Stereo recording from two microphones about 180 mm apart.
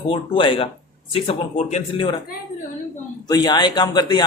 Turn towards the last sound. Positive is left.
turn(degrees=25)  # may be behind; listen again after turning